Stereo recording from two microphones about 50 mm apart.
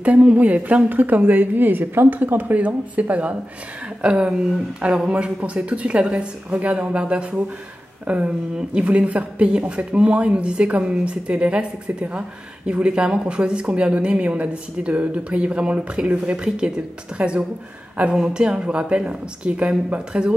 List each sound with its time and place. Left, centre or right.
0.0 s a woman's voice: right